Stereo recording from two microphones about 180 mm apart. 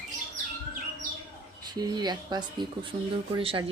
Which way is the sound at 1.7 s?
25° right (ahead or behind).